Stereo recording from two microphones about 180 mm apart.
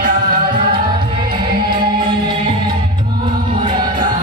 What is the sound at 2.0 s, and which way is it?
Music, 25° right (ahead or behind).